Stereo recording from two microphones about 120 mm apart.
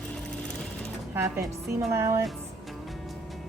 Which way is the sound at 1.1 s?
25° right (ahead or behind).